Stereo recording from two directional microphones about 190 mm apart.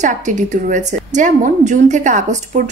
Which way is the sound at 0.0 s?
40° right (ahead or behind).